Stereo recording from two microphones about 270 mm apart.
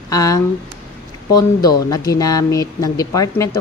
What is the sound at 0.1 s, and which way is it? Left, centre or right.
Speech, centre.